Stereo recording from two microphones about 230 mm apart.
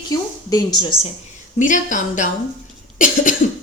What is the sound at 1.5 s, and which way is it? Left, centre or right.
Speech, left.